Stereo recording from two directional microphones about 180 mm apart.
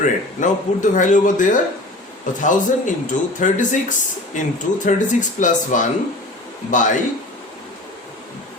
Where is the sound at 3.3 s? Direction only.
45° left (ahead or behind).